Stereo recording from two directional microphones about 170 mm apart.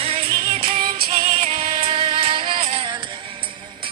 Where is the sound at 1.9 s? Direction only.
30° right (ahead or behind).